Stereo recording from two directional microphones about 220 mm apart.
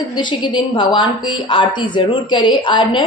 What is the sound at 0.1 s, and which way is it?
A woman's voice, 20° left (ahead or behind).